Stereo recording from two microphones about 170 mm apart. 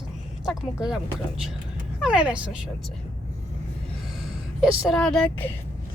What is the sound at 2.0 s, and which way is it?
Speech, 5° right (ahead or behind).